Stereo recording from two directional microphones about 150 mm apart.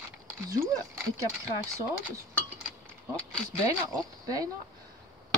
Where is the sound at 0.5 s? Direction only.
20° right (ahead or behind).